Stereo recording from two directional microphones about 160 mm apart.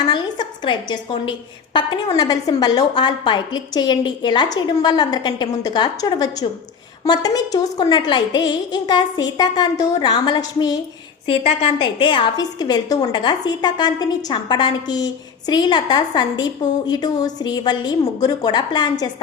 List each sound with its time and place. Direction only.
0.0 s a woman's voice: 30° left (ahead or behind)
11.3 s a woman's voice: 35° left (ahead or behind)